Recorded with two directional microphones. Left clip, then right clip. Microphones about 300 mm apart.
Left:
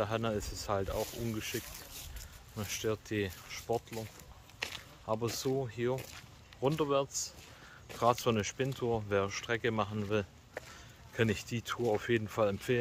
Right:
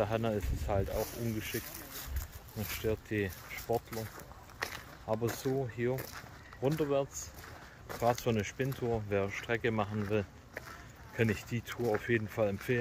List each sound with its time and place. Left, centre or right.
0.0 s speech: centre
2.7 s speech: centre
4.6 s walk: centre
5.1 s speech: centre
8.0 s speech: centre